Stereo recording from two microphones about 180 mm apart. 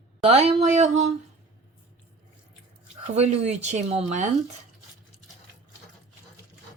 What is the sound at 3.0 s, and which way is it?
Speech, 35° right (ahead or behind).